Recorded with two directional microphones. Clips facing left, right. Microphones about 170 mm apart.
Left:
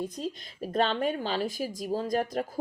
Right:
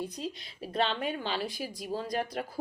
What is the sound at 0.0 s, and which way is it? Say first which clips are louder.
Speech: left 3 dB; 45° left (ahead or behind).